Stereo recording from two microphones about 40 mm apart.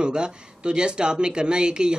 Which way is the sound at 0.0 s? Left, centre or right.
Right.